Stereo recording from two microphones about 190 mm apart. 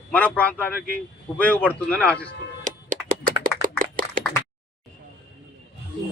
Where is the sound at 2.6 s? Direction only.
45° right (ahead or behind).